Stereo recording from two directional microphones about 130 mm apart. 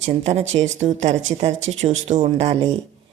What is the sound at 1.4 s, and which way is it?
A woman's voice, 55° right (ahead or behind).